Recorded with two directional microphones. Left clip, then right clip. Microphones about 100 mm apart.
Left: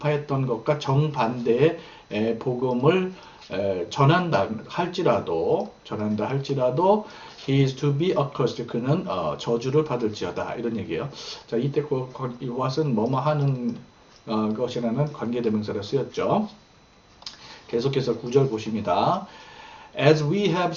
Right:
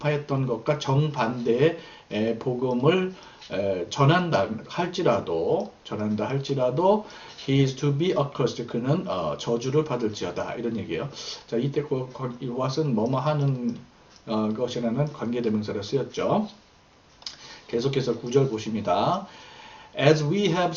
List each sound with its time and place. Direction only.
0.0 s a man's voice: 15° right (ahead or behind)